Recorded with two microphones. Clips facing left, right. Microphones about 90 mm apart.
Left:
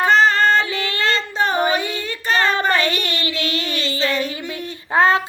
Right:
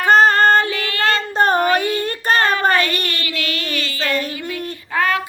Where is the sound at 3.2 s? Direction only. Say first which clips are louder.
Left 1 dB; 30° left (ahead or behind).